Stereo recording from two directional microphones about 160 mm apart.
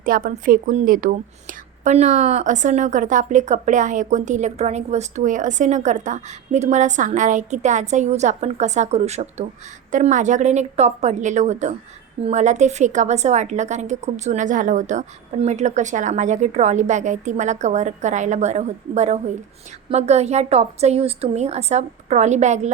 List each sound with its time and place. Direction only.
0.0 s a woman's voice: 60° right (ahead or behind)